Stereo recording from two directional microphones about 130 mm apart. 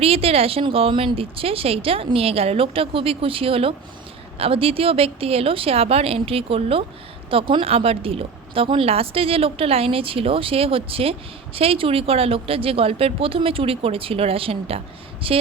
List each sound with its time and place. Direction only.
0.0 s speech: 50° right (ahead or behind)